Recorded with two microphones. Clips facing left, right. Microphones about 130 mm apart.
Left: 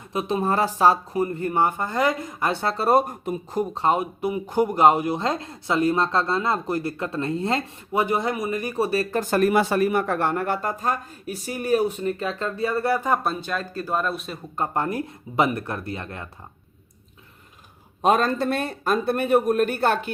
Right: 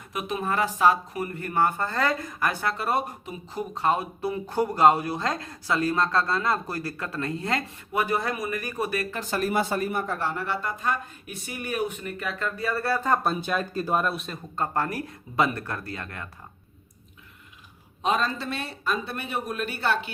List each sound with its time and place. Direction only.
0.1 s speech: 30° left (ahead or behind); by 3.7 s 45° left (ahead or behind)
3.8 s speech: 20° left (ahead or behind)
9.3 s speech: 65° left (ahead or behind); by 13.1 s 15° left (ahead or behind)
13.4 s speech: 10° right (ahead or behind)
14.0 s speech: centre (ahead or behind)
14.5 s speech: 20° left (ahead or behind)
18.0 s speech: 50° left (ahead or behind)